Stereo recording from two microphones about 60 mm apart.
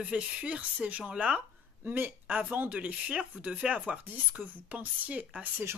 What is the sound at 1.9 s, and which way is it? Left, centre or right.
A woman's voice, right.